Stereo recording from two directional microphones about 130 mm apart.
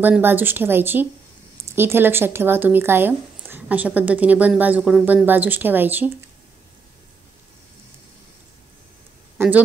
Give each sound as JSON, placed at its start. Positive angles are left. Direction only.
{"t": 0.0, "sound": "speech", "side_deg": -15}
{"t": 9.4, "sound": "speech", "side_deg": -20}